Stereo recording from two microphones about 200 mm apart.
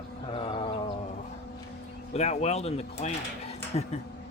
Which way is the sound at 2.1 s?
35° left (ahead or behind).